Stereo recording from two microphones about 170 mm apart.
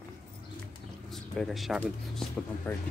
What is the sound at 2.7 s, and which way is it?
Speech, 15° left (ahead or behind).